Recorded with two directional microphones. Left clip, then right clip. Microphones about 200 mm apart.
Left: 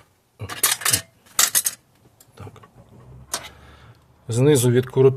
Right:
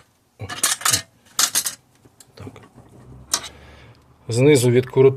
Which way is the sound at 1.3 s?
25° left (ahead or behind).